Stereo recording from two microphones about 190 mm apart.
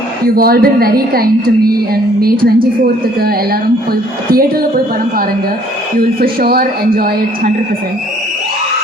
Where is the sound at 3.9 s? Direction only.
50° right (ahead or behind).